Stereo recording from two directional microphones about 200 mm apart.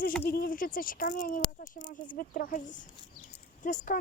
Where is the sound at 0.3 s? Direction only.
45° left (ahead or behind).